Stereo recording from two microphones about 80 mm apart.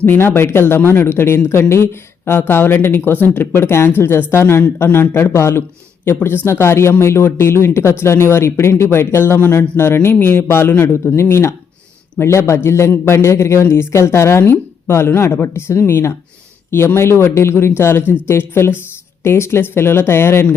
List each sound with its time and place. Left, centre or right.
0.0 s speech: left